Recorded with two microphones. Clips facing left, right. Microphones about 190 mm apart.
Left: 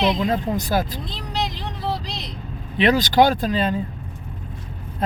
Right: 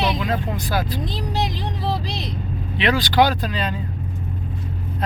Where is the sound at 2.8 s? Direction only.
45° left (ahead or behind).